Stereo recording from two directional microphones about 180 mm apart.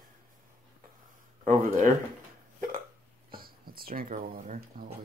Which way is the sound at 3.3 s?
55° right (ahead or behind).